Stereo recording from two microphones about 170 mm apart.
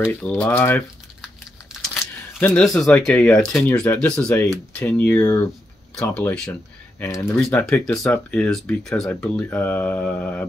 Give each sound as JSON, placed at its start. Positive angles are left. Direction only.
{"t": 0.0, "sound": "speech", "side_deg": 10}
{"t": 1.2, "sound": "crumpling", "side_deg": 0}
{"t": 2.4, "sound": "speech", "side_deg": 5}
{"t": 7.0, "sound": "speech", "side_deg": 15}
{"t": 7.3, "sound": "speech", "side_deg": 5}